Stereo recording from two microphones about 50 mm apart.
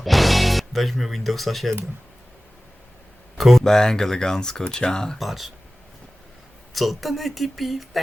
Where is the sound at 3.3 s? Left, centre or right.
Centre.